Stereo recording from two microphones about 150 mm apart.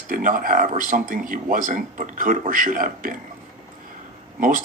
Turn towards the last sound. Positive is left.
turn(degrees=-65)  # may be behind; listen again after turning